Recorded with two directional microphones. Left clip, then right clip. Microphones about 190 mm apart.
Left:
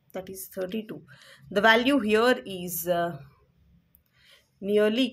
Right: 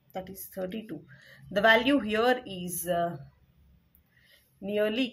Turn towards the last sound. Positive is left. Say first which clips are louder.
# left 5 dB
turn(degrees=30)  # may be behind; listen again after turning